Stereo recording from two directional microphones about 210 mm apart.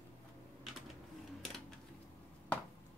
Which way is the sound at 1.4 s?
Centre (ahead or behind).